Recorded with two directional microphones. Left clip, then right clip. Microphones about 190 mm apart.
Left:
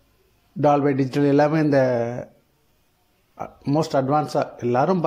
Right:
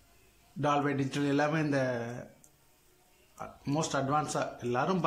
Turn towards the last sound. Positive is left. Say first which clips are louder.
# left 11 dB
turn(degrees=30)  # may be behind; listen again after turning